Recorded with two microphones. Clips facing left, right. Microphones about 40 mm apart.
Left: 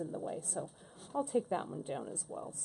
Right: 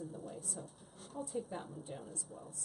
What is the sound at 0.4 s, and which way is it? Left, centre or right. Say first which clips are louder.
Speech: left 6 dB; left.